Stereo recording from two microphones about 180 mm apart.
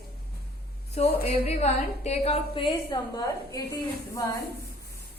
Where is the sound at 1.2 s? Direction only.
35° left (ahead or behind); by 3.6 s 20° left (ahead or behind).